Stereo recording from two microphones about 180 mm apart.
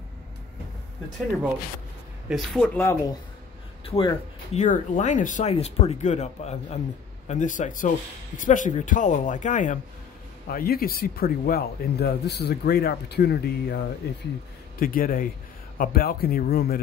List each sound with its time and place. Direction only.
2.2 s speech: centre (ahead or behind)
2.8 s speech: 15° left (ahead or behind)
3.8 s speech: 30° left (ahead or behind)
4.6 s speech: 40° left (ahead or behind)
10.5 s speech: 55° left (ahead or behind)
14.8 s speech: 50° left (ahead or behind)